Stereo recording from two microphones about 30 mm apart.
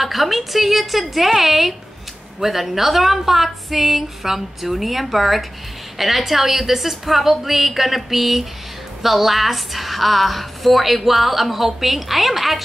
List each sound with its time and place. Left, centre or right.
0.0 s a woman's voice: centre